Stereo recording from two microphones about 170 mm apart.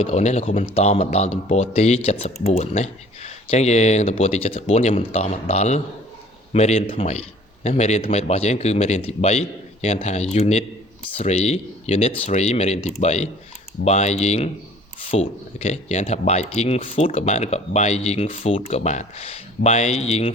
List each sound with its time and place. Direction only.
0.0 s speech: 40° left (ahead or behind)